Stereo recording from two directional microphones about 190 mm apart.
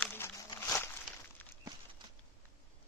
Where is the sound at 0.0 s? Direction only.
10° left (ahead or behind).